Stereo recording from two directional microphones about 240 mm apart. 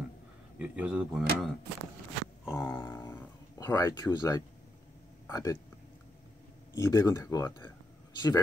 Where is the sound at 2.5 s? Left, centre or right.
Centre.